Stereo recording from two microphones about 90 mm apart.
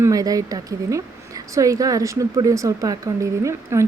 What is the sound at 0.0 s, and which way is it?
A woman's voice, 40° right (ahead or behind).